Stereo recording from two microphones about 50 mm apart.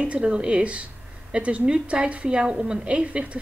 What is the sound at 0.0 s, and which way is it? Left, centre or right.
A woman's voice, right.